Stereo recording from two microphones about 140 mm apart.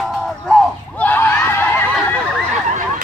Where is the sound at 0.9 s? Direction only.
15° left (ahead or behind).